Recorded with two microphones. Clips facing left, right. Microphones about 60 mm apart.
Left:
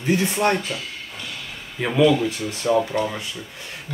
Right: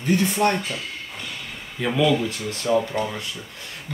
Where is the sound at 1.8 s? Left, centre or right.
Left.